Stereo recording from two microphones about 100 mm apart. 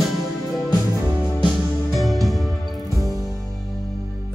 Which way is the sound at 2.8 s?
30° left (ahead or behind).